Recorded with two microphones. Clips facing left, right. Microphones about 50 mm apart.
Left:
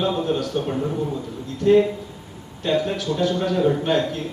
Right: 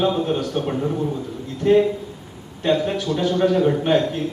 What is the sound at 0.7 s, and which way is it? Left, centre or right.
Speech, centre.